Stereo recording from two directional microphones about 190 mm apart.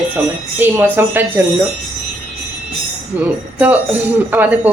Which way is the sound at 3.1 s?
10° right (ahead or behind).